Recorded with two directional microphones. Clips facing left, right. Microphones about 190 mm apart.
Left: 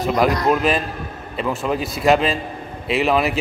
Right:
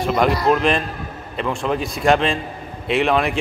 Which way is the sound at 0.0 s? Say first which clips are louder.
Even; centre (ahead or behind).